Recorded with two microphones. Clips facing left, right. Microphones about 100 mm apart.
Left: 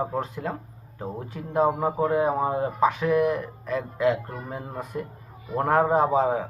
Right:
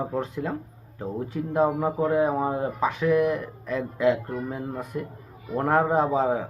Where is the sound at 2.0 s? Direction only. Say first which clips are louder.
Right 1 dB; 10° left (ahead or behind).